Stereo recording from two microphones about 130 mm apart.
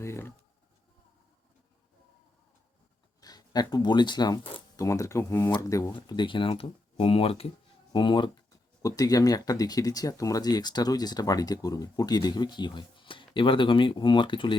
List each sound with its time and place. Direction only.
0.0 s speech: 20° left (ahead or behind)
3.2 s speech: 30° left (ahead or behind)
4.8 s speech: 25° left (ahead or behind); by 7.5 s 50° left (ahead or behind)
7.9 s speech: 35° left (ahead or behind)